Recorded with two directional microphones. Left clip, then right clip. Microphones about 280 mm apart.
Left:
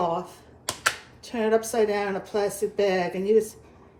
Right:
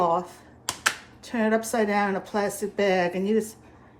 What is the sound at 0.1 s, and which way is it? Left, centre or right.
Computer keyboard, right.